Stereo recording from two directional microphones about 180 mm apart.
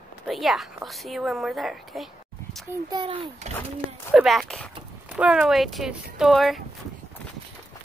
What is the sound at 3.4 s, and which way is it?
Speech, 40° right (ahead or behind).